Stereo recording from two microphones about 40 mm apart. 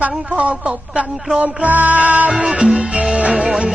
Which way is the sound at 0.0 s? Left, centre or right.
Right.